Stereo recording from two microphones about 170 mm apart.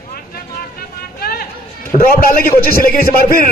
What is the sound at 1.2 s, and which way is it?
A man's voice, 65° left (ahead or behind).